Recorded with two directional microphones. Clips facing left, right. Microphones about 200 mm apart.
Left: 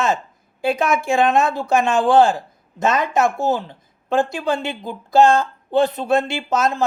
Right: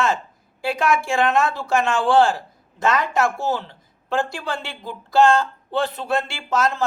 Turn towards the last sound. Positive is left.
turn(degrees=20)  # may be behind; listen again after turning